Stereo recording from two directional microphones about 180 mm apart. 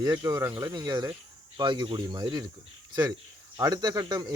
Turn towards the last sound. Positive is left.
turn(degrees=-20)  # may be behind; listen again after turning